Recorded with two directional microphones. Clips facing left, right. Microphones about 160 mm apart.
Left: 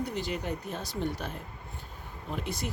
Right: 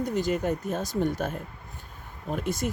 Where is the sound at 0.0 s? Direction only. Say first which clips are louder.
Right 7 dB; 45° right (ahead or behind).